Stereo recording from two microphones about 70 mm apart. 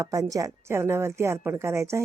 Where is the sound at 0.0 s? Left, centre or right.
Right.